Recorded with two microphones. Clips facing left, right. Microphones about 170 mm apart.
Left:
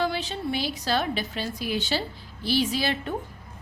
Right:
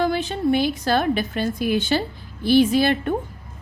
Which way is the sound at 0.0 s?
50° right (ahead or behind).